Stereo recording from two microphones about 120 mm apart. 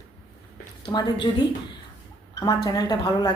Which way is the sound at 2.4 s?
30° left (ahead or behind).